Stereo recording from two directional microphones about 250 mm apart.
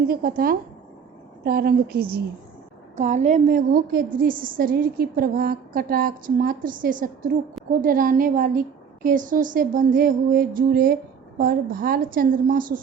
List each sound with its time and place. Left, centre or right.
0.1 s a woman's voice: right